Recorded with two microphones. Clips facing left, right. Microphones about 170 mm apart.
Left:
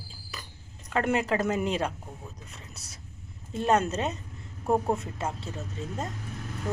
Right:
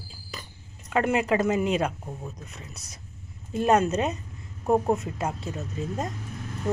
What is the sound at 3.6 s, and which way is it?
Speech, 10° right (ahead or behind).